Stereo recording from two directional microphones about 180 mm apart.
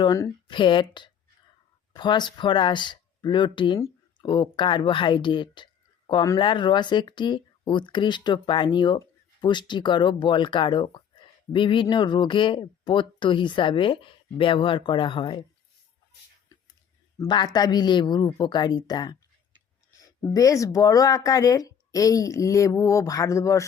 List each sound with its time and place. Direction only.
0.0 s speech: 20° left (ahead or behind)
17.2 s speech: 25° left (ahead or behind)